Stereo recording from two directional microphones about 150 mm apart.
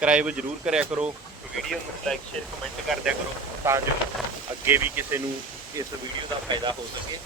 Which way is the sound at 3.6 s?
15° right (ahead or behind).